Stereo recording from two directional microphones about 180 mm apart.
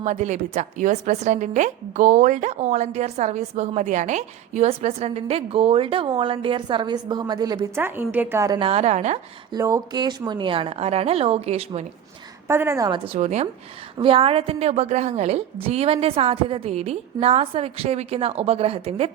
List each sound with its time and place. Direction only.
0.0 s a woman's voice: 40° right (ahead or behind); by 7.6 s 20° right (ahead or behind)
7.8 s a woman's voice: 10° right (ahead or behind); by 9.1 s 40° right (ahead or behind)
9.5 s a woman's voice: 20° right (ahead or behind); by 11.9 s 35° right (ahead or behind)
12.5 s a woman's voice: 15° right (ahead or behind)
13.1 s a woman's voice: 40° right (ahead or behind)